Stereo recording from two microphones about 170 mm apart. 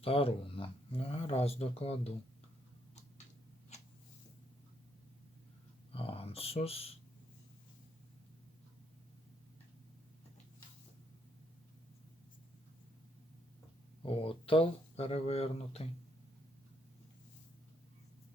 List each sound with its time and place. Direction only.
0.0 s speech: 35° left (ahead or behind)
3.7 s a sound: 40° left (ahead or behind)
5.9 s speech: 35° left (ahead or behind)
14.0 s speech: 30° left (ahead or behind)